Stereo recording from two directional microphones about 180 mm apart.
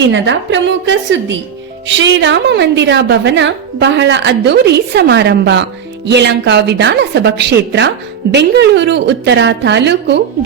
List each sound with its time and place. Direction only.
0.0 s a woman's voice: 85° right